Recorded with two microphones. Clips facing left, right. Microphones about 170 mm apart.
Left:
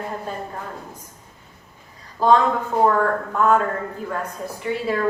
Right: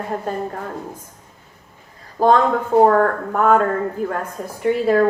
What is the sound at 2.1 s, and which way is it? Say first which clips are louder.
Speech: right 2 dB; 50° right (ahead or behind).